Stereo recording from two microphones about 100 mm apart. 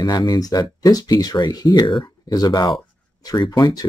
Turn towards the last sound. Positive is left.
turn(degrees=40)  # may be behind; listen again after turning